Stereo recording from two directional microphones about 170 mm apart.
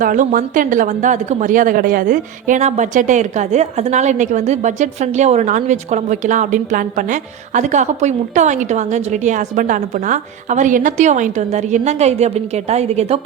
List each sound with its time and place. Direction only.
0.0 s speech: 50° right (ahead or behind)